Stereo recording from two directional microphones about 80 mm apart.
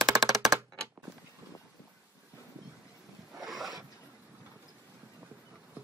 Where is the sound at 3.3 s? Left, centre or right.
Centre.